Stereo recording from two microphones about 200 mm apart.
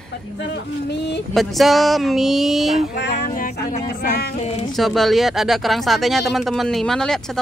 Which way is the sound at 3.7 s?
40° left (ahead or behind).